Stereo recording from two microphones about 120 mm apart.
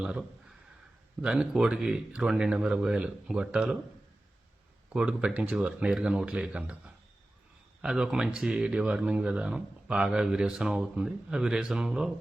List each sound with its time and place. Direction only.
0.0 s speech: 10° right (ahead or behind)
4.9 s speech: 10° right (ahead or behind)